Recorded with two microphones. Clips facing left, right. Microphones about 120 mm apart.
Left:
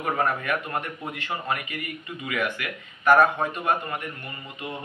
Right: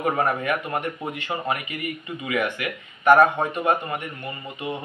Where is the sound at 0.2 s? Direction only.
20° right (ahead or behind).